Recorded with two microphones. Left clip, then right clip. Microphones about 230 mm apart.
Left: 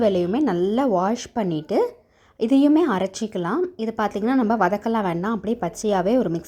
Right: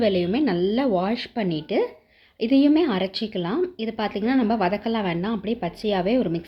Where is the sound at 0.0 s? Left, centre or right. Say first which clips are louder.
Left 2 dB; centre.